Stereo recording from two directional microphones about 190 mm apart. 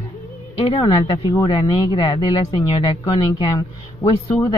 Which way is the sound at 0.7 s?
25° left (ahead or behind).